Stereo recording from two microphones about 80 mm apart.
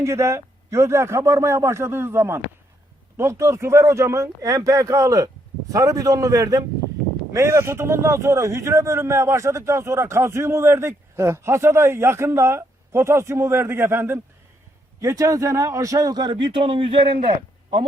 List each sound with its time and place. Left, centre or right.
0.0 s a man's voice: right
7.3 s a man's voice: right
15.0 s a man's voice: right